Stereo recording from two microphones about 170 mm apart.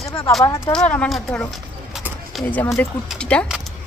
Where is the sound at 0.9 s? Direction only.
5° left (ahead or behind).